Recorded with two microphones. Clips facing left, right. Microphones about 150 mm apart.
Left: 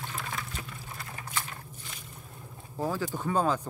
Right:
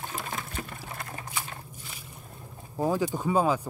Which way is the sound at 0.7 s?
75° right (ahead or behind).